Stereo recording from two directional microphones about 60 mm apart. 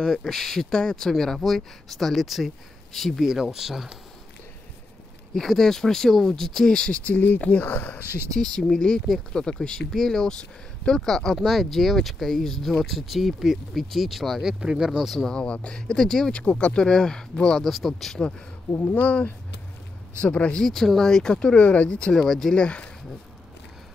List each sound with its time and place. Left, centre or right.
0.3 s speech: centre
5.3 s speech: centre; by 7.3 s left
7.3 s speech: centre
7.6 s speech: left
8.4 s speech: centre
14.4 s speech: centre
15.0 s speech: centre
18.8 s speech: left
20.6 s speech: centre
22.1 s speech: centre